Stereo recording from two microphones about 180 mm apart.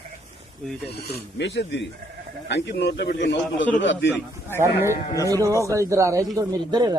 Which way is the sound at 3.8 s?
90° left.